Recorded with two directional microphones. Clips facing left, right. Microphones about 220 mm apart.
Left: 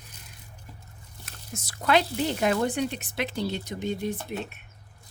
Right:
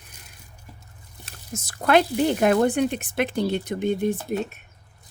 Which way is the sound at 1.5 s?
45° right (ahead or behind).